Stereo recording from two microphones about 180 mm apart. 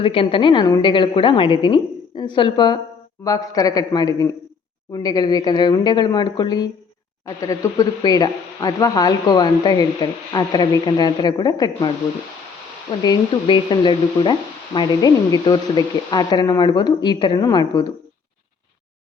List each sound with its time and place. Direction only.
0.0 s speech: 30° left (ahead or behind)
13.0 s speech: 25° left (ahead or behind)